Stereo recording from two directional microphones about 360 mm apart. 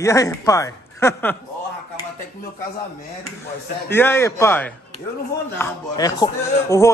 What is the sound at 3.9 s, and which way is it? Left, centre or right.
Speech, centre.